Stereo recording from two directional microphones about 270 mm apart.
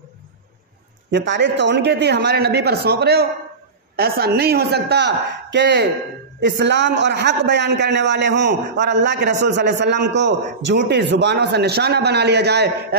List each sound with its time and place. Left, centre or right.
1.1 s a man's voice: right